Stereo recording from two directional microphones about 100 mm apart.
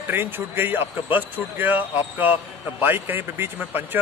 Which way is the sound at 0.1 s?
20° right (ahead or behind).